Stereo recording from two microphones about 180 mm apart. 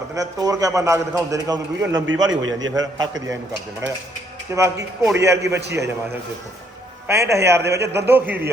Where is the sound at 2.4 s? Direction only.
90° right.